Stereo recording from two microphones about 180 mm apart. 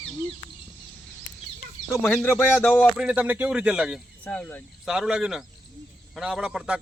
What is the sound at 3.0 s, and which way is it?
A man's voice, 5° right (ahead or behind).